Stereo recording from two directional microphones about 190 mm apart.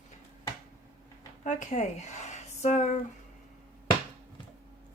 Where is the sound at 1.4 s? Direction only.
40° left (ahead or behind).